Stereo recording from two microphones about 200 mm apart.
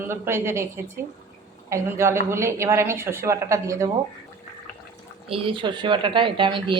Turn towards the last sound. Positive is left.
turn(degrees=-25)  # may be behind; listen again after turning